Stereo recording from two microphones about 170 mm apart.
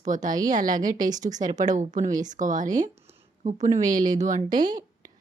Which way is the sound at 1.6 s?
45° right (ahead or behind).